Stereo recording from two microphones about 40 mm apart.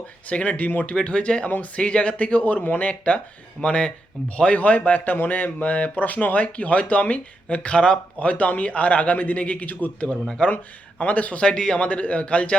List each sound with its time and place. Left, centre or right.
0.4 s speech: left
1.0 s a man's voice: left
10.4 s speech: left
11.0 s speech: left
11.3 s speech: left
11.8 s speech: left